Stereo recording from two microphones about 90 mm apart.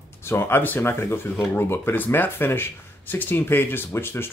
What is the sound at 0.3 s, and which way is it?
Speech, 25° left (ahead or behind).